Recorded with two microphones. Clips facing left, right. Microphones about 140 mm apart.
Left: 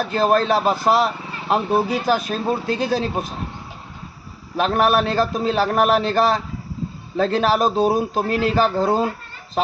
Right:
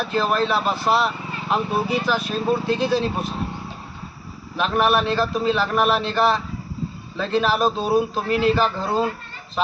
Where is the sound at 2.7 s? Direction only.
45° left (ahead or behind).